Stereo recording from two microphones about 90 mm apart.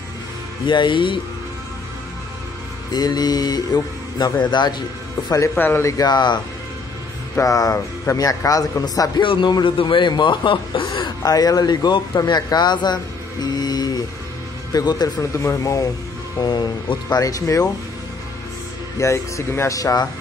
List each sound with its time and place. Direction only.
0.7 s speech: 60° left (ahead or behind)
2.9 s speech: 50° left (ahead or behind)
5.6 s speech: 20° left (ahead or behind)
5.9 s speech: 45° left (ahead or behind)
7.3 s speech: 40° left (ahead or behind)
9.2 s speech: 65° left (ahead or behind)
11.2 s speech: 45° left (ahead or behind)
15.3 s speech: 35° left (ahead or behind)
16.3 s speech: 55° left (ahead or behind)
17.1 s speech: 40° left (ahead or behind)
18.9 s speech: 35° left (ahead or behind)